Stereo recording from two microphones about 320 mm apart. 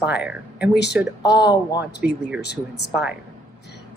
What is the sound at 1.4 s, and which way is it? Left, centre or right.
Speech, centre.